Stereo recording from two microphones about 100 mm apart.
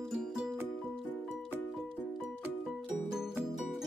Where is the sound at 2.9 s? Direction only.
5° right (ahead or behind).